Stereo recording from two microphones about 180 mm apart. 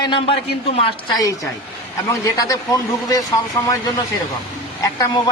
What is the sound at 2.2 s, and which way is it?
A man's voice, 20° left (ahead or behind).